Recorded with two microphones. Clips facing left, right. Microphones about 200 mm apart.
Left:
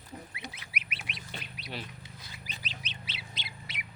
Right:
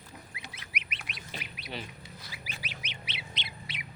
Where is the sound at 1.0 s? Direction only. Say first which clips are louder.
Even; centre (ahead or behind).